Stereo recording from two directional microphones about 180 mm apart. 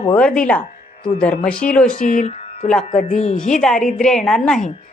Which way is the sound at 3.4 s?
5° left (ahead or behind).